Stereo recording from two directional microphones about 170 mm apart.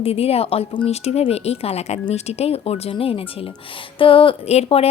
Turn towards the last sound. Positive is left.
turn(degrees=35)  # may be behind; listen again after turning